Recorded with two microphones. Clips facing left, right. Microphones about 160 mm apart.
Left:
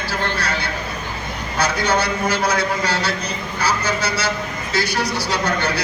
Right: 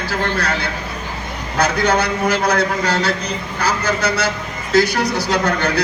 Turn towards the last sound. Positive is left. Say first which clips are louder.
# right 3 dB
turn(degrees=-55)  # may be behind; listen again after turning